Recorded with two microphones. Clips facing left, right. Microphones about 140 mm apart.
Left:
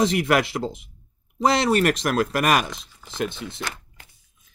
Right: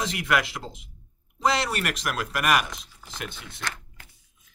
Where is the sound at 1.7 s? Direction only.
30° left (ahead or behind).